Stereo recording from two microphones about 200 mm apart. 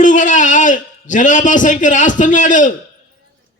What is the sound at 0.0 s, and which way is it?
A man's voice, 40° left (ahead or behind).